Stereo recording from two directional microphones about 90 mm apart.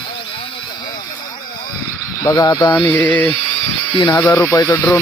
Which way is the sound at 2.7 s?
20° left (ahead or behind).